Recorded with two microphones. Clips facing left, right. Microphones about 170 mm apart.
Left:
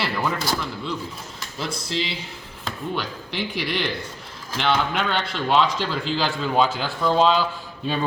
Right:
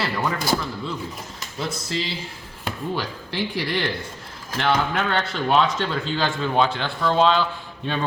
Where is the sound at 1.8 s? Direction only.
Centre (ahead or behind).